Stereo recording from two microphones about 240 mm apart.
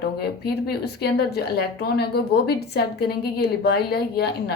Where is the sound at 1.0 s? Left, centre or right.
Left.